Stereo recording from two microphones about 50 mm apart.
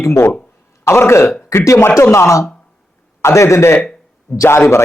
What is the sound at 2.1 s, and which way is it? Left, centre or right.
Speech, left.